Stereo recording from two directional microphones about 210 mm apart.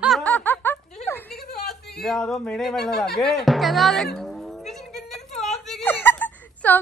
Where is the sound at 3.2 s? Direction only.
Centre (ahead or behind).